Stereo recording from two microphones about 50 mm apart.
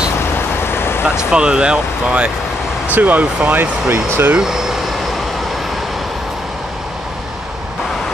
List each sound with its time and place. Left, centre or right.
0.7 s vehicle: left
1.3 s speech: centre
2.9 s speech: right
3.9 s speech: right
4.4 s speech: centre